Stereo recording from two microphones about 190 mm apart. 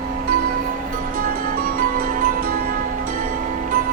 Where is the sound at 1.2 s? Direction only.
50° right (ahead or behind).